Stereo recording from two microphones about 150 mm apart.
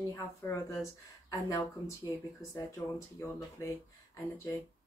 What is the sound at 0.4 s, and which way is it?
Speech, 15° left (ahead or behind).